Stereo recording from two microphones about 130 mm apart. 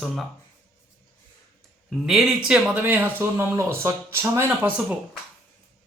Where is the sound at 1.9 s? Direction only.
Centre (ahead or behind).